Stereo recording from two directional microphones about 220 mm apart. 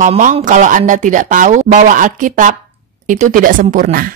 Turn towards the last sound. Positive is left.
turn(degrees=-40)  # may be behind; listen again after turning